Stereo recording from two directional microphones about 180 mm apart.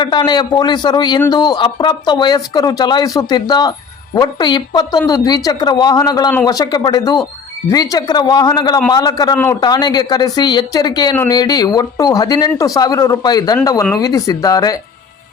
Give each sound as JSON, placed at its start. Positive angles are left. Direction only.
{"t": 0.0, "sound": "speech", "side_deg": 25}